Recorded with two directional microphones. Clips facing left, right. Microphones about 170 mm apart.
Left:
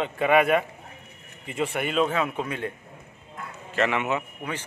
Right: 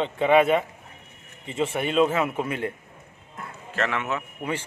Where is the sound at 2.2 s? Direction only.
15° right (ahead or behind).